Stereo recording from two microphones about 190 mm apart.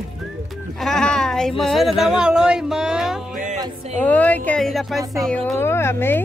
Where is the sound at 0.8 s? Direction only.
5° left (ahead or behind).